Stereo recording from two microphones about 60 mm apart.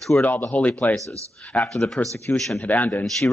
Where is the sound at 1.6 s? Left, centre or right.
Centre.